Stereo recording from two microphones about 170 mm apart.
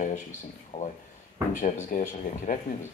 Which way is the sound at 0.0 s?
45° left (ahead or behind).